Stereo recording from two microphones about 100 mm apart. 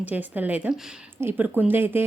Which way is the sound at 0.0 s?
15° right (ahead or behind).